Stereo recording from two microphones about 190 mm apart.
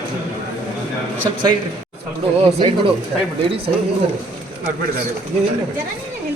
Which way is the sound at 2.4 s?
30° right (ahead or behind).